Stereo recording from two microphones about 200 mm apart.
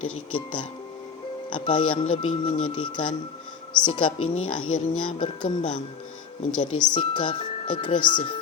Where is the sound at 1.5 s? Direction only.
25° left (ahead or behind).